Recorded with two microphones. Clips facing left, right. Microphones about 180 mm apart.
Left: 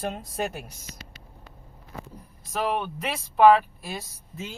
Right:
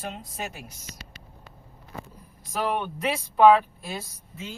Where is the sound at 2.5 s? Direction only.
5° left (ahead or behind).